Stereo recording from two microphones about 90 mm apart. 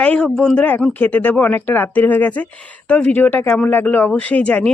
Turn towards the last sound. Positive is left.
turn(degrees=15)  # may be behind; listen again after turning